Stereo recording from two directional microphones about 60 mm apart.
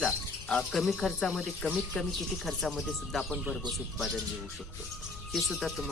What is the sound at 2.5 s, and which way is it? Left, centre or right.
Speech, centre.